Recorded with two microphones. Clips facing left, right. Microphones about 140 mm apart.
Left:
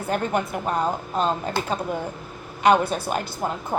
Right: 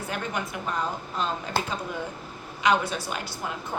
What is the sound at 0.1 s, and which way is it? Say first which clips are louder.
Speech: left 9 dB; 45° left (ahead or behind).